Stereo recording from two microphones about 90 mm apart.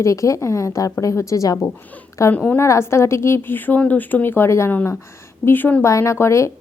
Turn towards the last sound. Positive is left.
turn(degrees=30)  # may be behind; listen again after turning